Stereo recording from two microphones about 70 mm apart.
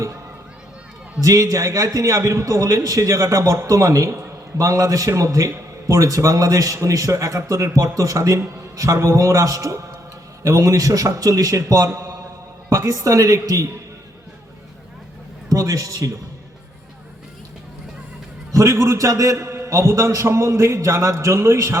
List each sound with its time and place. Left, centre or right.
1.2 s a man's voice: right
15.4 s a man's voice: right
18.5 s a man's voice: right